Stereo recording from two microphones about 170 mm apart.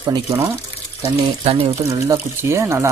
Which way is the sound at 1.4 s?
35° right (ahead or behind).